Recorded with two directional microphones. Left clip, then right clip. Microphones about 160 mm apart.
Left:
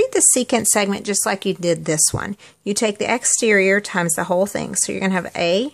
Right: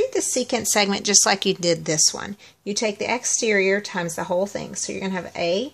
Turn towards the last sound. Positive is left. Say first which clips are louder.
# left 4 dB
turn(degrees=25)  # may be behind; listen again after turning